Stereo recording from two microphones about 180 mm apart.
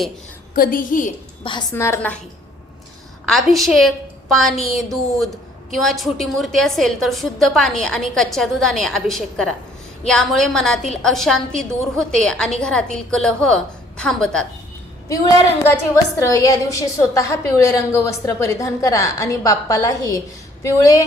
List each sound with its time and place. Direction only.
0.5 s a woman's voice: 50° left (ahead or behind)
1.7 s a woman's voice: 15° left (ahead or behind)
3.2 s a woman's voice: centre (ahead or behind)
15.1 s a woman's voice: 20° left (ahead or behind)